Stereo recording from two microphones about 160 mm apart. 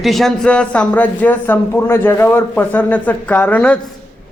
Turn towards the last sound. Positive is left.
turn(degrees=10)  # may be behind; listen again after turning